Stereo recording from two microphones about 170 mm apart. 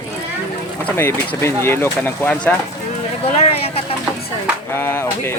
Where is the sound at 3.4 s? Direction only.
35° left (ahead or behind).